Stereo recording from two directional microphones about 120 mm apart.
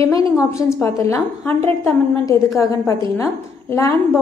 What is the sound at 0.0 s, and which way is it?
A woman's voice, 30° left (ahead or behind).